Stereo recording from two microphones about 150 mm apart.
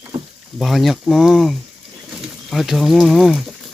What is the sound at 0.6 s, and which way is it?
Speech, centre (ahead or behind).